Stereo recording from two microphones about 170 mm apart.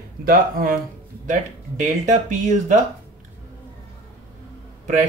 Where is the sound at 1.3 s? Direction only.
45° right (ahead or behind).